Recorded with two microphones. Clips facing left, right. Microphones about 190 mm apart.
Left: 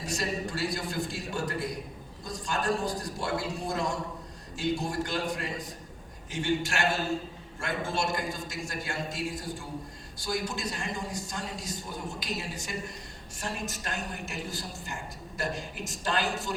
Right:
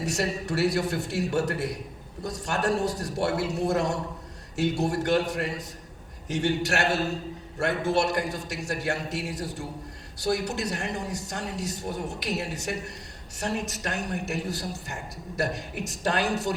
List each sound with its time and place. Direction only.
0.0 s a man's voice: 70° right (ahead or behind)